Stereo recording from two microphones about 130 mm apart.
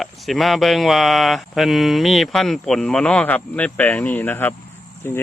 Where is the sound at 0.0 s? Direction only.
Centre (ahead or behind).